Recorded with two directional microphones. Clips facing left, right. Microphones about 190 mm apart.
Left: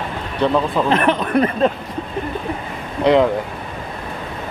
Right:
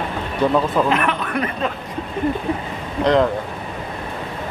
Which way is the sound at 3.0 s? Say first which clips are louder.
Left 2 dB; 5° left (ahead or behind).